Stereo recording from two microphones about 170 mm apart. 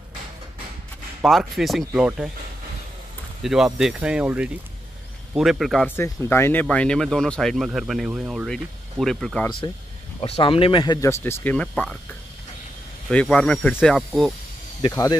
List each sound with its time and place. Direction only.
1.2 s speech: centre (ahead or behind)
3.4 s speech: 5° right (ahead or behind)
5.9 s speech: 15° left (ahead or behind)
10.2 s speech: 35° left (ahead or behind); by 12.0 s 5° left (ahead or behind)
13.1 s speech: 5° left (ahead or behind)
14.8 s speech: 20° left (ahead or behind)